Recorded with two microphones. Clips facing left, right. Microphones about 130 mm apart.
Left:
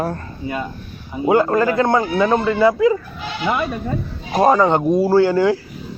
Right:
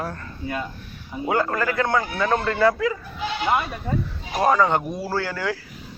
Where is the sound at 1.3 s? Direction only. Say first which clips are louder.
Left 8 dB; 25° left (ahead or behind).